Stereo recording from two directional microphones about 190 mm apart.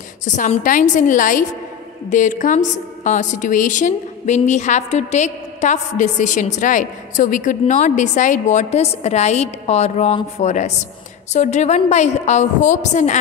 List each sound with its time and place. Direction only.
0.2 s a woman's voice: 40° left (ahead or behind)